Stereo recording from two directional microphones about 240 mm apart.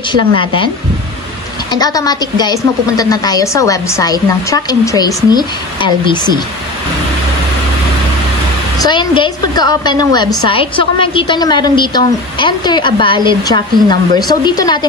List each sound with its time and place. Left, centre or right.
0.1 s a woman's voice: left
1.7 s a woman's voice: centre
8.7 s a woman's voice: centre